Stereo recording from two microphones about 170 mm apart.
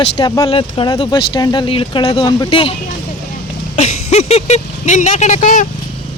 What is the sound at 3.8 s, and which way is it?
Speech, 40° left (ahead or behind).